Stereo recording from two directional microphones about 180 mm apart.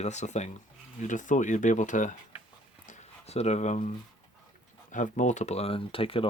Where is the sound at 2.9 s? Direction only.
40° left (ahead or behind).